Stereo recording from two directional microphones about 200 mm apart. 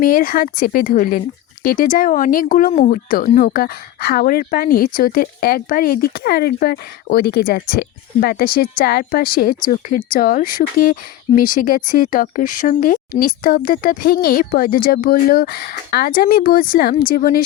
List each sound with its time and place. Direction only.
0.0 s speech: 45° left (ahead or behind)